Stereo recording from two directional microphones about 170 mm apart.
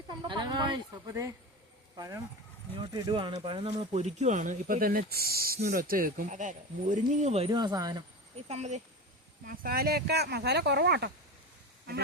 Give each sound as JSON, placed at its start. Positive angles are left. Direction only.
{"t": 0.2, "sound": "speech", "side_deg": -25}
{"t": 7.5, "sound": "speech", "side_deg": -25}
{"t": 8.4, "sound": "speech", "side_deg": -40}
{"t": 9.5, "sound": "speech", "side_deg": -60}